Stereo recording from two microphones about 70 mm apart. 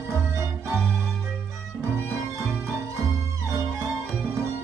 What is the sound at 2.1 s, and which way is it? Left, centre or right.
Music, right.